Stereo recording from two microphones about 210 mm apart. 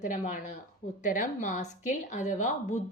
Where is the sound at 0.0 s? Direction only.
35° left (ahead or behind).